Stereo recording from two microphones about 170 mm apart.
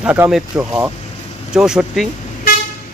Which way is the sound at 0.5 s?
15° right (ahead or behind).